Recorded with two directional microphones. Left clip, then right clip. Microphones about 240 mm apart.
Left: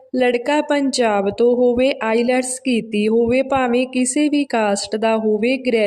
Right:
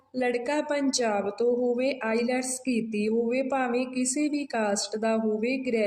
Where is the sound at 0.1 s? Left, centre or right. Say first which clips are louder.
Left 10 dB; left.